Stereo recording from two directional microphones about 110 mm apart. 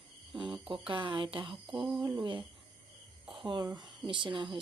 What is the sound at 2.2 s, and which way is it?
Speech, 45° right (ahead or behind).